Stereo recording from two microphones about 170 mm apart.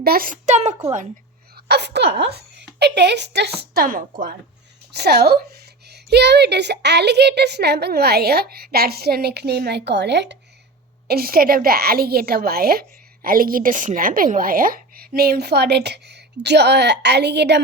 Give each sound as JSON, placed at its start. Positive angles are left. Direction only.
{"t": 0.0, "sound": "a woman's voice", "side_deg": -60}
{"t": 1.5, "sound": "speech", "side_deg": -75}
{"t": 4.9, "sound": "a woman's voice", "side_deg": -75}
{"t": 11.1, "sound": "a woman's voice", "side_deg": -60}